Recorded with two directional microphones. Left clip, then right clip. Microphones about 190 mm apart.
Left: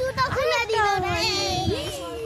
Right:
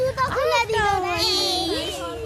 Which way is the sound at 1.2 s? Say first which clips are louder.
Right 3 dB; 20° right (ahead or behind).